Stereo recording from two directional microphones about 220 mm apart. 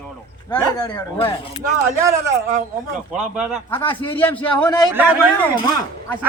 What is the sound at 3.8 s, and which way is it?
Speech, 25° left (ahead or behind).